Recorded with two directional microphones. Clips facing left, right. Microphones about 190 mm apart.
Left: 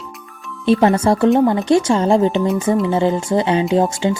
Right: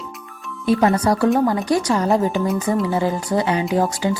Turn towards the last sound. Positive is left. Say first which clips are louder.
# left 3 dB
turn(degrees=20)  # may be behind; listen again after turning